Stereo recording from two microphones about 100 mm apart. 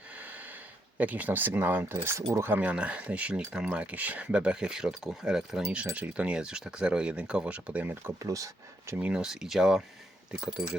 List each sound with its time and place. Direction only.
0.2 s snort: 15° right (ahead or behind)
0.9 s speech: 15° right (ahead or behind)
8.2 s speech: 35° right (ahead or behind)
9.0 s speech: 5° right (ahead or behind)